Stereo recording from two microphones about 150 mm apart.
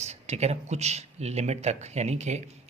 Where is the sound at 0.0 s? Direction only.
45° right (ahead or behind).